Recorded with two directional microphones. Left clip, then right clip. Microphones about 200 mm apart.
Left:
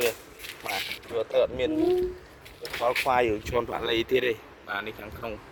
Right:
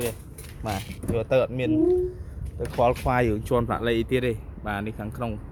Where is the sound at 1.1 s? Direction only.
15° right (ahead or behind).